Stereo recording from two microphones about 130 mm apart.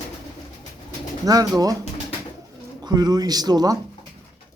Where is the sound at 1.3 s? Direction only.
30° right (ahead or behind).